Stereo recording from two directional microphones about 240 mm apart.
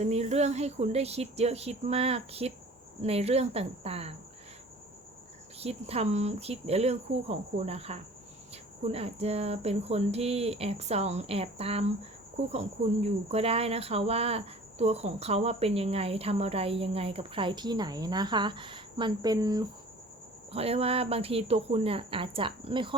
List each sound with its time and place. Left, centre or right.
0.0 s speech: right
5.5 s speech: right